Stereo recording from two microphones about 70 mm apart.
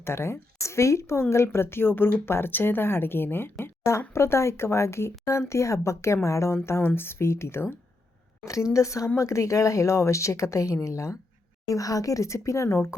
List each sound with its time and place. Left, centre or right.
0.0 s a woman's voice: left
8.4 s speech: left